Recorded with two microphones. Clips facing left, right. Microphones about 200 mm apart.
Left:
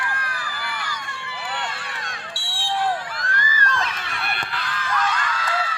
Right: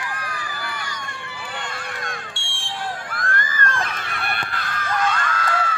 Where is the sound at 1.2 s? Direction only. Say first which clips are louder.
Left 4 dB; 50° right (ahead or behind).